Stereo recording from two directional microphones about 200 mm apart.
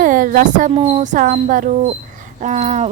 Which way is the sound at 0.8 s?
35° right (ahead or behind).